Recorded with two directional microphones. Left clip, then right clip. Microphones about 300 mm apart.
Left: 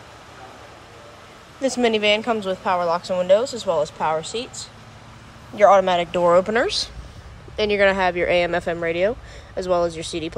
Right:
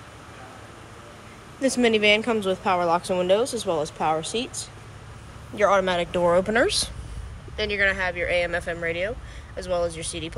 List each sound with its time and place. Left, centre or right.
1.6 s a woman's voice: centre
7.5 s speech: centre